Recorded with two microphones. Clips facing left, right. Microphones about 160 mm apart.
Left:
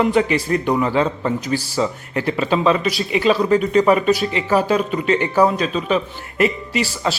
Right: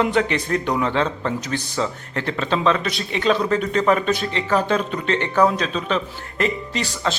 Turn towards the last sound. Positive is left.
turn(degrees=10)  # may be behind; listen again after turning